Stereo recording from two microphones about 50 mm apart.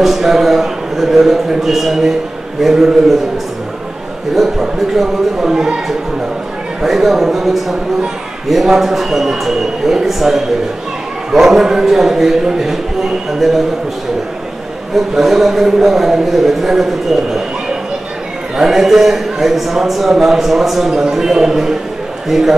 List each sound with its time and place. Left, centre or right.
0.0 s a man's voice: centre
4.4 s a man's voice: centre
15.0 s a man's voice: centre